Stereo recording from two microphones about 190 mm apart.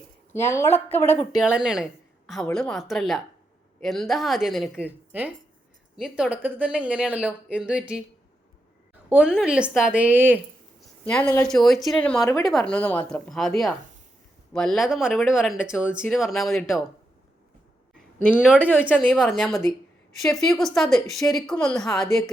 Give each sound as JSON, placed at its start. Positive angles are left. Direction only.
{"t": 0.3, "sound": "speech", "side_deg": 15}
{"t": 1.4, "sound": "speech", "side_deg": -5}
{"t": 9.0, "sound": "speech", "side_deg": -5}
{"t": 11.0, "sound": "speech", "side_deg": 10}
{"t": 12.2, "sound": "a woman's voice", "side_deg": 20}
{"t": 12.5, "sound": "speech", "side_deg": 5}
{"t": 18.3, "sound": "speech", "side_deg": -5}